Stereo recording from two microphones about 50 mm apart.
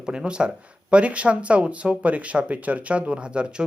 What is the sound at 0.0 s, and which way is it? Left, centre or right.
Speech, centre.